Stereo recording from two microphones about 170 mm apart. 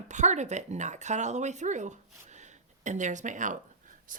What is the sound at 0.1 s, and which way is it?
Speech, 45° right (ahead or behind).